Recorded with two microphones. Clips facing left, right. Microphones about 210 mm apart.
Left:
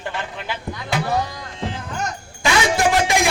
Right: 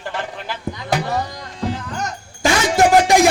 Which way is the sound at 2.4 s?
45° right (ahead or behind).